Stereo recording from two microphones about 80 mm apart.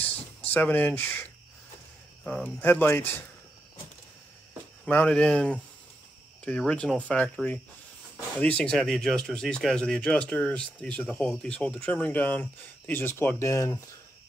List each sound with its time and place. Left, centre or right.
0.5 s speech: left
2.4 s speech: left
4.8 s speech: centre
8.4 s speech: centre
13.4 s speech: left